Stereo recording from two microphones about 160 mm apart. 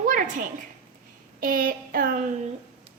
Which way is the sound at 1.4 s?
60° right (ahead or behind).